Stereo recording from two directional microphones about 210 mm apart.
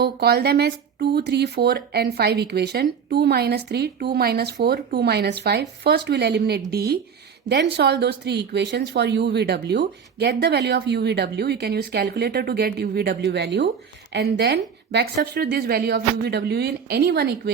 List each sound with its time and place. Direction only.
0.0 s speech: 50° right (ahead or behind)